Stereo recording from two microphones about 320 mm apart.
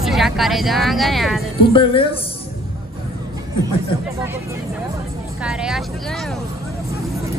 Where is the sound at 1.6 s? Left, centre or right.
Centre.